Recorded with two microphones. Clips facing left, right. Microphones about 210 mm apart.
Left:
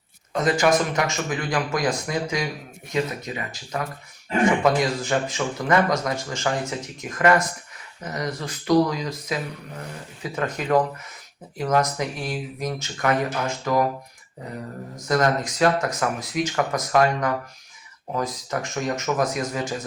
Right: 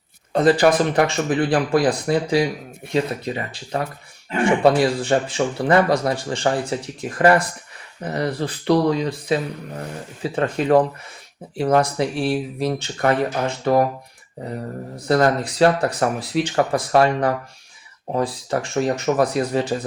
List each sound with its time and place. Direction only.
0.3 s speech: 30° right (ahead or behind)
14.9 s speech: 35° right (ahead or behind)